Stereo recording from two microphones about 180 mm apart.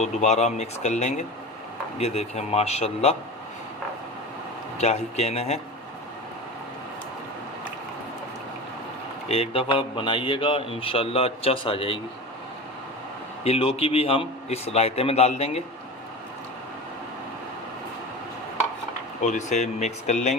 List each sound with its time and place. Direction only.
0.0 s speech: 40° left (ahead or behind)
4.8 s speech: 40° left (ahead or behind)
9.3 s speech: 30° left (ahead or behind)
13.4 s speech: 35° left (ahead or behind)
19.2 s speech: 40° left (ahead or behind)